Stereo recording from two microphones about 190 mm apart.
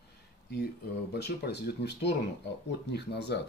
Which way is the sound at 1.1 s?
60° left (ahead or behind).